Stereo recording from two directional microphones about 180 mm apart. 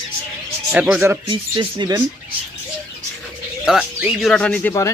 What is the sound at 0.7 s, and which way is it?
Speech, 5° right (ahead or behind).